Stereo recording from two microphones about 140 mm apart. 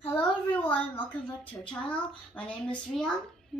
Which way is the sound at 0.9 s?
40° left (ahead or behind).